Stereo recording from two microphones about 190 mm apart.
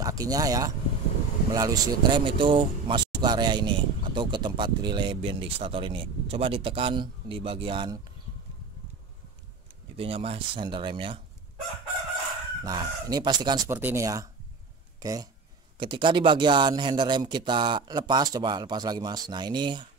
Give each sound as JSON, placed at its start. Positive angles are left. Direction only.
{"t": 0.0, "sound": "speech", "side_deg": -20}
{"t": 9.9, "sound": "speech", "side_deg": -30}
{"t": 12.6, "sound": "speech", "side_deg": -20}